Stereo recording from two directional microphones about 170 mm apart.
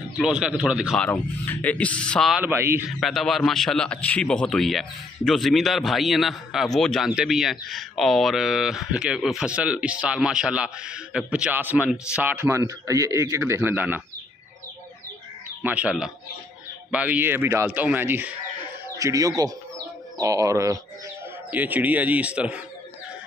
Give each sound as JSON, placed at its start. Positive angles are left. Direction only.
{"t": 0.1, "sound": "a man's voice", "side_deg": -5}
{"t": 1.0, "sound": "speech", "side_deg": 10}
{"t": 2.4, "sound": "a man's voice", "side_deg": -15}
{"t": 3.0, "sound": "a man's voice", "side_deg": 0}
{"t": 15.6, "sound": "a man's voice", "side_deg": -10}